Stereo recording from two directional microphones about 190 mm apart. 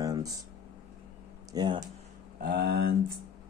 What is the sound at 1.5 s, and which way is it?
Speech, 20° right (ahead or behind).